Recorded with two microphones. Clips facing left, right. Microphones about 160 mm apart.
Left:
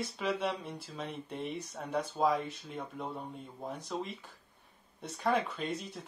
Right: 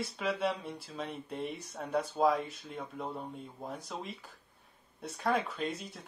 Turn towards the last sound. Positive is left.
turn(degrees=0)  # may be behind; listen again after turning